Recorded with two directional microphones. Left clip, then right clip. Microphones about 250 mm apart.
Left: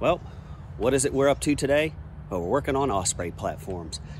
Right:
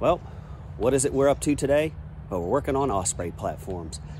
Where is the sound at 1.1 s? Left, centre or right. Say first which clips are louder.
Even; centre.